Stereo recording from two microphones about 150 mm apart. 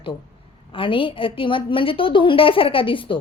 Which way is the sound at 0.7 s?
35° left (ahead or behind).